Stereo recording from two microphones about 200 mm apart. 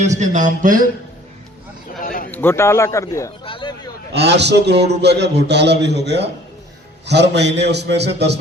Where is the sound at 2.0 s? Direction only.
45° left (ahead or behind).